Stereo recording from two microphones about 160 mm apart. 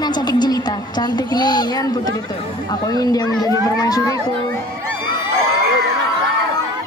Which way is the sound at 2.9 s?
25° left (ahead or behind).